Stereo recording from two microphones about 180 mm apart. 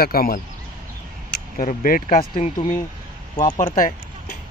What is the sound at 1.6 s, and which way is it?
Speech, 50° left (ahead or behind).